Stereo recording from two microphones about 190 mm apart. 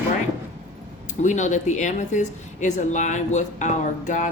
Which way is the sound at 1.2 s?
40° left (ahead or behind).